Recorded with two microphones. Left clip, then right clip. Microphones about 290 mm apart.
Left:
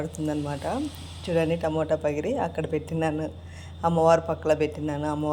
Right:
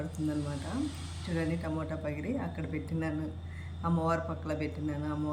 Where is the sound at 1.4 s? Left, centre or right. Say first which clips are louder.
Left 11 dB; left.